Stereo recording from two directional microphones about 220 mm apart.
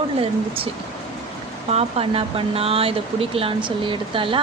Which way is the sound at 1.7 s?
25° right (ahead or behind).